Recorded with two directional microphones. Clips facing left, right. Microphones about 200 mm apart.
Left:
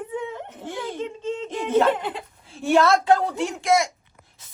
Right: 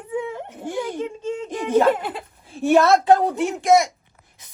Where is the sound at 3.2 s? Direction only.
20° right (ahead or behind).